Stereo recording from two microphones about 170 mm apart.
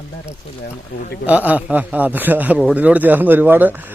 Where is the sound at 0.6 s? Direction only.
70° left (ahead or behind).